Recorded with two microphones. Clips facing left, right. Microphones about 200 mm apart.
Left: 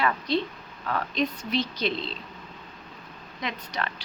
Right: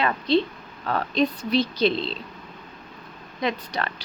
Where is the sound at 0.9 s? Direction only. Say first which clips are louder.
Right 5 dB; 35° right (ahead or behind).